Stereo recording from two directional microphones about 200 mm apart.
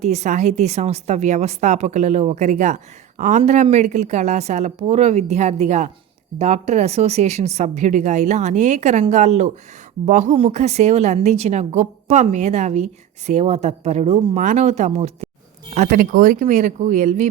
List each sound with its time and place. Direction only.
0.0 s a woman's voice: 35° right (ahead or behind)